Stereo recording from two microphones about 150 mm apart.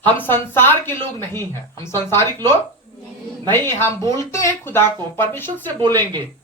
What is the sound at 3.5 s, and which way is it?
Speech, 15° left (ahead or behind).